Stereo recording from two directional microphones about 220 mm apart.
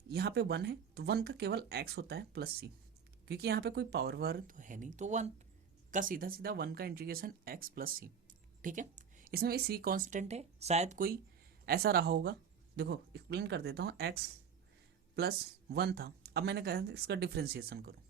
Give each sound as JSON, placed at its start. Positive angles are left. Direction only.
{"t": 0.1, "sound": "speech", "side_deg": -50}